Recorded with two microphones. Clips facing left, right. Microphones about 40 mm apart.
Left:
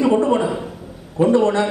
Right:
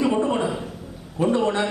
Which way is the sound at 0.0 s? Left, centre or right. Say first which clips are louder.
Left 5 dB; centre.